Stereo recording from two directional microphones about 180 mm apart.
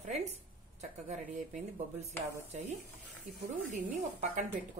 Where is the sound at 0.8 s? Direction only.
40° right (ahead or behind).